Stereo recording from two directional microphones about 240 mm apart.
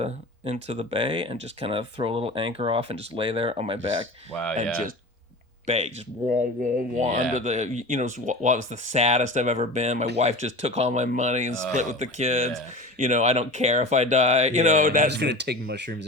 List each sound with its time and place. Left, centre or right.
0.0 s speech: right
6.2 s speech: right
15.1 s speech: right